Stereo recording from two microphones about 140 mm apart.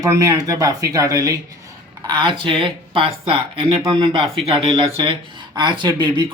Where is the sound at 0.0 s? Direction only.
25° right (ahead or behind).